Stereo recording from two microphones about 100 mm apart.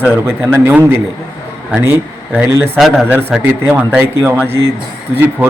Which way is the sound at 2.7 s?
Centre (ahead or behind).